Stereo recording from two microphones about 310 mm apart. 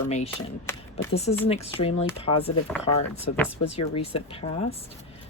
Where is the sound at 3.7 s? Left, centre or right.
Centre.